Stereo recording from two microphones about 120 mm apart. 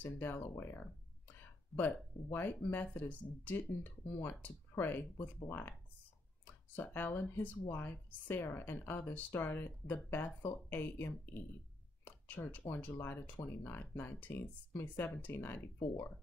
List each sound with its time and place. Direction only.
0.0 s speech: 15° left (ahead or behind)
2.3 s speech: 15° left (ahead or behind)